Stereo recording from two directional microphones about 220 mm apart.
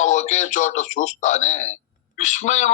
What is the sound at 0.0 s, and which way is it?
A man's voice, 30° left (ahead or behind).